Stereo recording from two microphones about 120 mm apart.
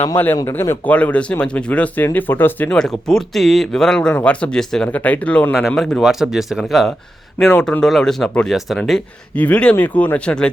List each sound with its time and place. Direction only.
0.3 s speech: 25° left (ahead or behind)
5.5 s speech: centre (ahead or behind)
7.4 s speech: 15° left (ahead or behind)